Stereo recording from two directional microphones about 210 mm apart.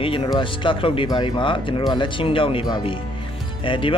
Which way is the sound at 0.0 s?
25° left (ahead or behind).